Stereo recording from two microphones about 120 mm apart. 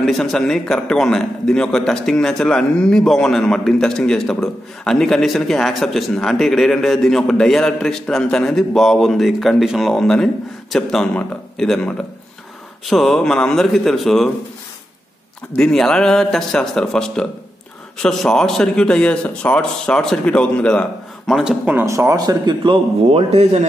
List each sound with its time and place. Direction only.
0.0 s a man's voice: centre (ahead or behind)
12.9 s a man's voice: centre (ahead or behind)
15.5 s a man's voice: 5° left (ahead or behind)
21.3 s a man's voice: 5° right (ahead or behind)
21.7 s a man's voice: 20° right (ahead or behind); by 23.7 s 65° right (ahead or behind)